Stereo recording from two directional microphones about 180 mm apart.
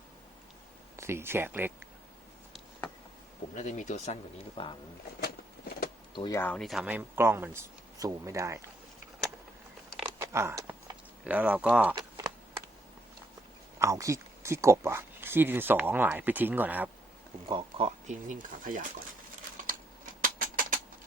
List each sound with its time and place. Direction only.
0.9 s speech: 15° right (ahead or behind)
3.5 s speech: 40° left (ahead or behind)
6.1 s speech: 20° left (ahead or behind)
6.4 s speech: 5° left (ahead or behind); by 8.5 s 15° right (ahead or behind)
10.2 s a sound: 15° right (ahead or behind)
11.9 s typing: 20° right (ahead or behind)
13.7 s speech: 15° right (ahead or behind)
17.5 s speech: 30° right (ahead or behind); by 18.9 s 50° right (ahead or behind)
20.2 s a sound: 50° right (ahead or behind)